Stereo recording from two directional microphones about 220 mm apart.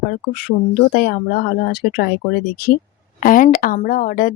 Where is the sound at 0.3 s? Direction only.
45° left (ahead or behind).